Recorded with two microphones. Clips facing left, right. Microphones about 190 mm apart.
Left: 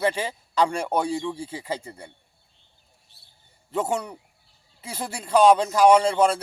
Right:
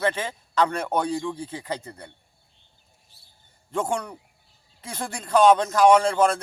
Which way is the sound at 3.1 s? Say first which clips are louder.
Even; 60° left (ahead or behind).